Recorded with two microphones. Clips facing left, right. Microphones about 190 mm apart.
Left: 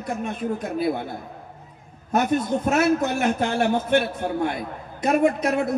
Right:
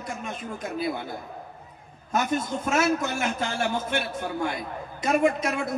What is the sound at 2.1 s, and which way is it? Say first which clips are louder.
A man's voice: left 5 dB; 60° left (ahead or behind).